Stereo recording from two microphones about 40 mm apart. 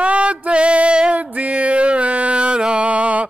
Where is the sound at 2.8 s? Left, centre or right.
Right.